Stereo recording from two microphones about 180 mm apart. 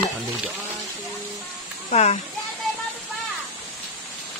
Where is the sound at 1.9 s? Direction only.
40° left (ahead or behind).